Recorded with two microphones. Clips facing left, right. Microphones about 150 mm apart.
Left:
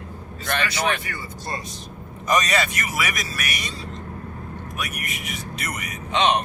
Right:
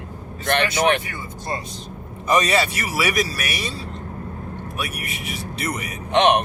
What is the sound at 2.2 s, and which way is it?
Speech, 30° right (ahead or behind).